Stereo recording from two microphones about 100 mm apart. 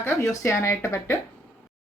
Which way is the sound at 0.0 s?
30° left (ahead or behind).